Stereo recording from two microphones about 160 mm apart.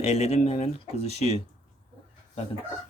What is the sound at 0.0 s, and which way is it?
Speech, 45° left (ahead or behind).